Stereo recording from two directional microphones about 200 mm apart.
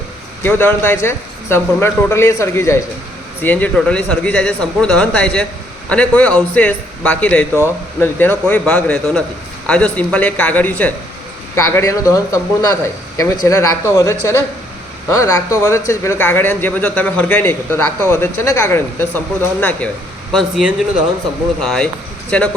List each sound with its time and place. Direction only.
0.4 s a man's voice: 10° left (ahead or behind)
20.3 s speech: 5° right (ahead or behind)